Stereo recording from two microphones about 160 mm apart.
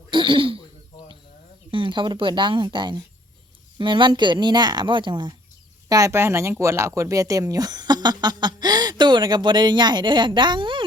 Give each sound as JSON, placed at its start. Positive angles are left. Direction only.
{"t": 0.1, "sound": "throat clearing", "side_deg": -30}
{"t": 1.7, "sound": "speech", "side_deg": -30}